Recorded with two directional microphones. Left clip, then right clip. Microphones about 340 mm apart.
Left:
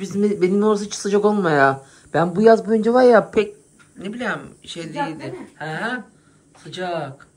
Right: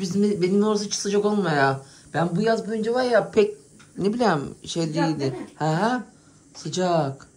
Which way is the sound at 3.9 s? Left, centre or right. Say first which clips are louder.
Right 4 dB; centre.